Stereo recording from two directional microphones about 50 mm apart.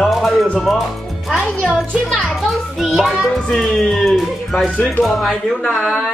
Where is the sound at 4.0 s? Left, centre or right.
Centre.